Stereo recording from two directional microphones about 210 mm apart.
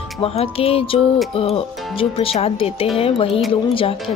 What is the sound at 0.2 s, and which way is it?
Speech, 30° left (ahead or behind).